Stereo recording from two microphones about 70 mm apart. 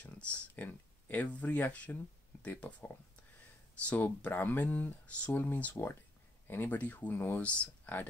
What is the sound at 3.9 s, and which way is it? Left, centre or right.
Speech, left.